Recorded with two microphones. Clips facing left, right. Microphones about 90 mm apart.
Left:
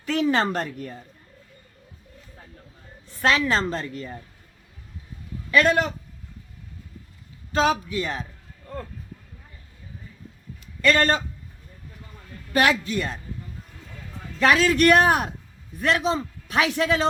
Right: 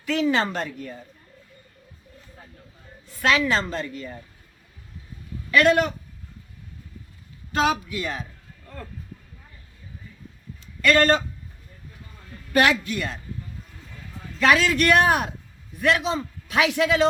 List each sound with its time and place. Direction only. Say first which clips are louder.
0.0 s a man's voice: even; 35° left (ahead or behind)
3.2 s a man's voice: even; 35° left (ahead or behind)
5.5 s a man's voice: right 1 dB; 25° left (ahead or behind)
7.7 s a man's voice: left 1 dB; 30° left (ahead or behind)
10.8 s a man's voice: right 2 dB; 25° left (ahead or behind)
12.5 s speech: right 1 dB; 20° left (ahead or behind)
14.3 s a man's voice: left 1 dB; 30° left (ahead or behind)